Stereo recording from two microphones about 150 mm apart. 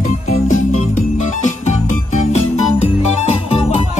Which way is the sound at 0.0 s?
45° left (ahead or behind).